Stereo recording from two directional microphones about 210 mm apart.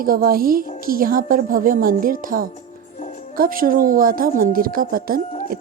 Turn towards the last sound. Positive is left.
turn(degrees=-45)  # may be behind; listen again after turning